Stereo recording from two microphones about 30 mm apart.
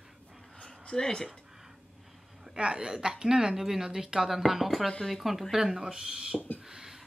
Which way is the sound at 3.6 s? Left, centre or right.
Centre.